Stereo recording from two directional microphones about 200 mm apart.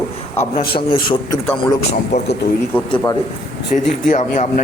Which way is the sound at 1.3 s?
15° left (ahead or behind).